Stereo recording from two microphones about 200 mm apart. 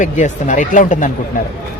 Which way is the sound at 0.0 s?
40° left (ahead or behind).